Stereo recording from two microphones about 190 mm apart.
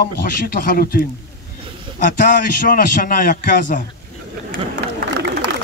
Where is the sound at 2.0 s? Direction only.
45° left (ahead or behind).